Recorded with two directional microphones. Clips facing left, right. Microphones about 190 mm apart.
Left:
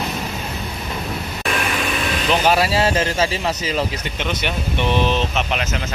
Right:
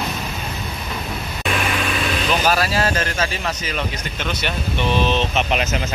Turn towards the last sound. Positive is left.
turn(degrees=15)  # may be behind; listen again after turning